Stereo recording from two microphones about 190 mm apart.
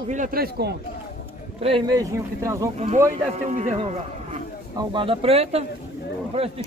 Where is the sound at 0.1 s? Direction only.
45° right (ahead or behind).